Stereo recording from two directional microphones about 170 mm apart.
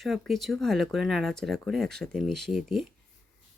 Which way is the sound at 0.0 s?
Centre (ahead or behind).